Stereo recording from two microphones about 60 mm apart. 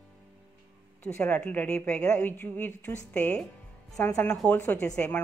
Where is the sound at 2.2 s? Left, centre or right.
Left.